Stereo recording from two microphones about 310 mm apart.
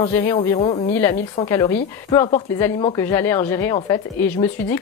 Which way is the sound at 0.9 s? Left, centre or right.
Centre.